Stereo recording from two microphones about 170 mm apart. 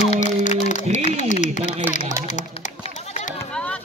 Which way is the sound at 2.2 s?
45° left (ahead or behind).